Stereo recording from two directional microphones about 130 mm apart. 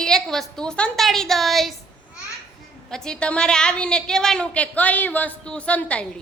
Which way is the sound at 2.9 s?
5° left (ahead or behind).